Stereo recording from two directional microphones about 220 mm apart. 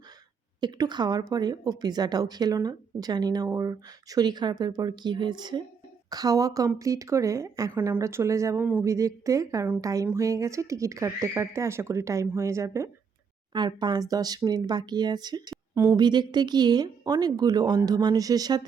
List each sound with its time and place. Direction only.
0.6 s a woman's voice: 20° right (ahead or behind)